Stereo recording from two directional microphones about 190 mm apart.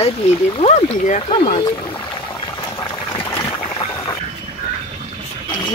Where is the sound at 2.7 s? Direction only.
15° left (ahead or behind).